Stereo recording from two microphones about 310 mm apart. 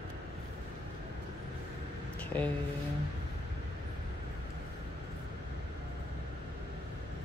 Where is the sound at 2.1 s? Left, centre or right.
Centre.